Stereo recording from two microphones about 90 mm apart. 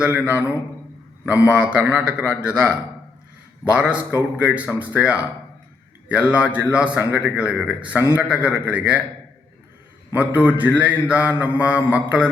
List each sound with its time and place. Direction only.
0.0 s a man's voice: 20° right (ahead or behind)
1.2 s mantra: 15° right (ahead or behind)
1.9 s a man's voice: 15° right (ahead or behind)
3.6 s mantra: 15° right (ahead or behind)
10.1 s mantra: 15° right (ahead or behind)